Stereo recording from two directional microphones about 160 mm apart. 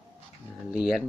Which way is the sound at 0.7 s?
5° right (ahead or behind).